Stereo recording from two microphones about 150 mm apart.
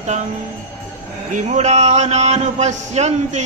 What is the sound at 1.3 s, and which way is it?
A man's voice, 55° right (ahead or behind).